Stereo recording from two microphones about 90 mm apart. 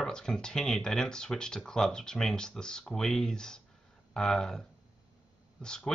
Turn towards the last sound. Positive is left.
turn(degrees=10)  # may be behind; listen again after turning